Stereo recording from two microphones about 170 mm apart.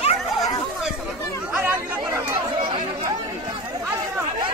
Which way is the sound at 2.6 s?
25° right (ahead or behind).